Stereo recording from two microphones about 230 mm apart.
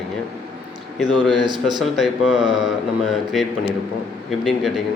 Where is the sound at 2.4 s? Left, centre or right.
Centre.